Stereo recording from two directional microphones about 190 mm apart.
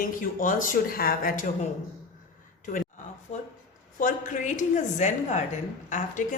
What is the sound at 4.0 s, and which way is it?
A woman's voice, 45° left (ahead or behind).